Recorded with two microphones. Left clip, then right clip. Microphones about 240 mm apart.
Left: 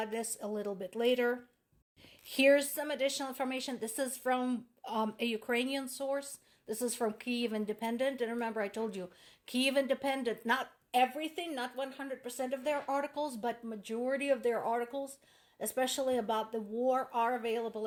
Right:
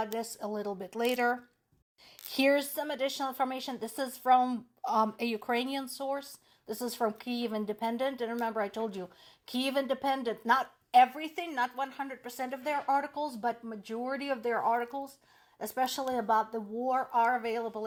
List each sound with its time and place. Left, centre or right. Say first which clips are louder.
0.0 s a woman's voice: right 3 dB; right
2.7 s a woman's voice: right 1 dB; right
12.4 s a woman's voice: right 1 dB; right
16.4 s a woman's voice: right 2 dB; right